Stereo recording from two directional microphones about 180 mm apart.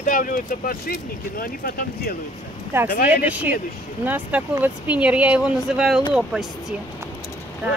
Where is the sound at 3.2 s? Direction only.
10° right (ahead or behind).